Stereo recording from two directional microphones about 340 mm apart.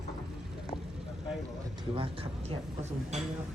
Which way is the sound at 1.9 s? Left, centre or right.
Centre.